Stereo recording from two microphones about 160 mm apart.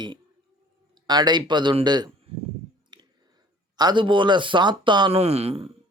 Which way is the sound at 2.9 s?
25° right (ahead or behind).